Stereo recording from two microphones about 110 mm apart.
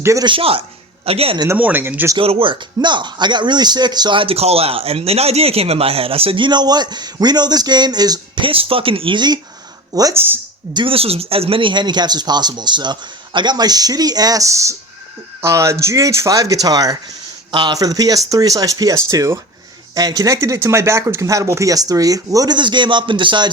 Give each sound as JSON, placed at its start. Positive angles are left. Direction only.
{"t": 0.0, "sound": "speech", "side_deg": -30}
{"t": 0.3, "sound": "speech", "side_deg": -55}
{"t": 1.5, "sound": "speech", "side_deg": -15}
{"t": 2.1, "sound": "speech", "side_deg": -55}
{"t": 8.4, "sound": "speech", "side_deg": -55}
{"t": 10.2, "sound": "speech", "side_deg": -20}
{"t": 10.8, "sound": "speech", "side_deg": -55}